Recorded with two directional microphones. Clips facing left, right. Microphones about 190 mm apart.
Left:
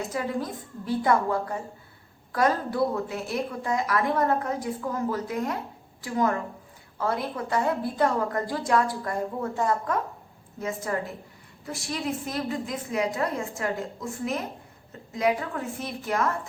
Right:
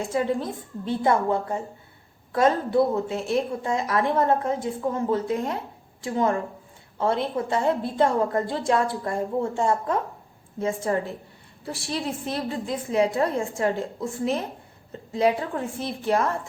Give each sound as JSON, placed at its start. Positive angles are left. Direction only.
{"t": 0.0, "sound": "a woman's voice", "side_deg": -25}